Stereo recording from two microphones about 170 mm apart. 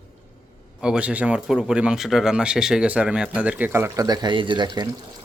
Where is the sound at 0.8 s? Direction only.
5° right (ahead or behind).